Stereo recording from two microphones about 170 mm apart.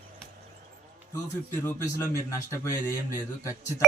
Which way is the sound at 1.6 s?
20° left (ahead or behind).